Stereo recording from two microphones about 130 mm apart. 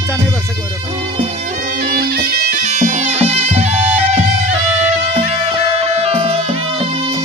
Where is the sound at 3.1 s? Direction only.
50° right (ahead or behind).